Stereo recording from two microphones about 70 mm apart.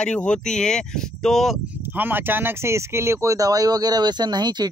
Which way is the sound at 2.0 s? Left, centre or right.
Right.